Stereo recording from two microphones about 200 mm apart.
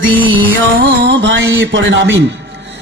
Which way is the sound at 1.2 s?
65° right (ahead or behind).